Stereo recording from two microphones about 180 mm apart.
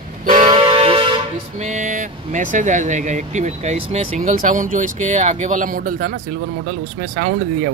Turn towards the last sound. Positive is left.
turn(degrees=-50)  # may be behind; listen again after turning